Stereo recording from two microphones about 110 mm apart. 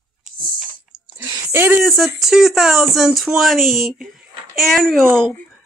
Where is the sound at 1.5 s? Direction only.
20° right (ahead or behind).